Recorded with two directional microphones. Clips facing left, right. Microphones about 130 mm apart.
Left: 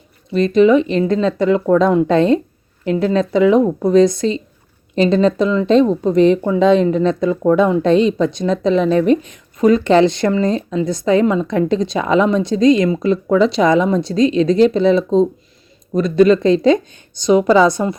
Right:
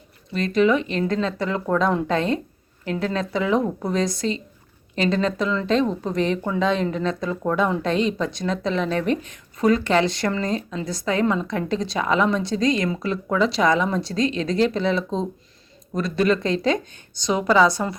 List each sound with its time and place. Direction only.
0.3 s speech: 25° left (ahead or behind)